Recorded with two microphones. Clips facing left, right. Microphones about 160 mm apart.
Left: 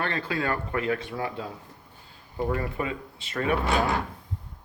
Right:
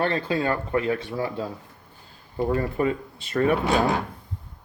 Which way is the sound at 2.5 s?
40° right (ahead or behind).